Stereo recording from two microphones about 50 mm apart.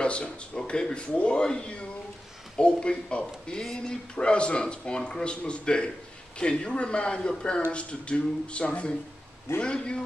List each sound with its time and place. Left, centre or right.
0.0 s speech: left